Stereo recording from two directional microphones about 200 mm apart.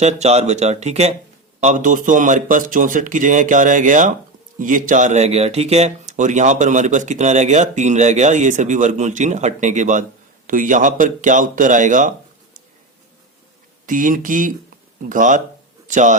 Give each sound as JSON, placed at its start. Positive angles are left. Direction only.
{"t": 0.0, "sound": "speech", "side_deg": -35}
{"t": 13.8, "sound": "speech", "side_deg": -40}